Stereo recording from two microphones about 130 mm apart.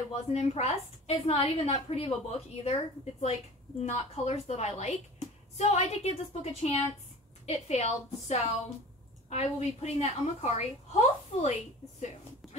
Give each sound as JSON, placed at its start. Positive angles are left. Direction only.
{"t": 0.3, "sound": "a woman's voice", "side_deg": 55}